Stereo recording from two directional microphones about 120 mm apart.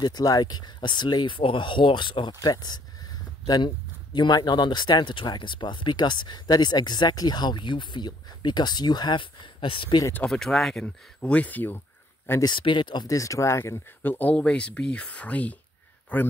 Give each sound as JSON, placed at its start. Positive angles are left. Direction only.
{"t": 0.0, "sound": "speech", "side_deg": 30}
{"t": 10.2, "sound": "speech", "side_deg": 5}
{"t": 12.4, "sound": "speech", "side_deg": 40}